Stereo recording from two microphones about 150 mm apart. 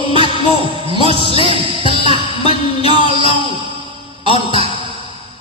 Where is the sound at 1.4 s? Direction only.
35° left (ahead or behind).